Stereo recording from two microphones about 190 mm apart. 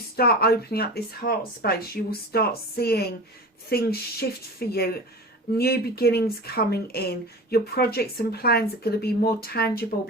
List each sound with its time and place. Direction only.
0.2 s speech: 55° left (ahead or behind)